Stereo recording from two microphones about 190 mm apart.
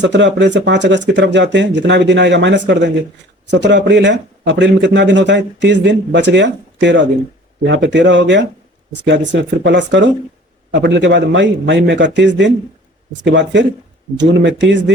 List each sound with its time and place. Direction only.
0.0 s speech: 70° right (ahead or behind)